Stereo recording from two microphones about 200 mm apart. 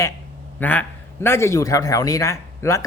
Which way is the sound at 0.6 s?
10° left (ahead or behind).